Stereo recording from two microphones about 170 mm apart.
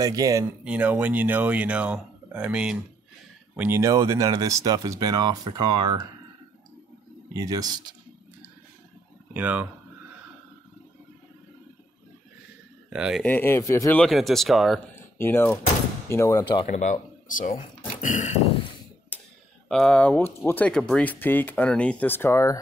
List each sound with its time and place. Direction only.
0.0 s speech: 20° right (ahead or behind)
0.7 s speech: 10° right (ahead or behind)
7.3 s speech: 20° right (ahead or behind)
9.3 s speech: 10° right (ahead or behind)
12.9 s speech: 5° right (ahead or behind)
13.2 s speech: 10° left (ahead or behind)
14.0 s speech: centre (ahead or behind)
15.1 s speech: 15° left (ahead or behind)
16.6 s speech: 50° left (ahead or behind)
18.0 s dog: 45° left (ahead or behind)
19.1 s a sound: 10° left (ahead or behind)
19.7 s speech: 5° left (ahead or behind)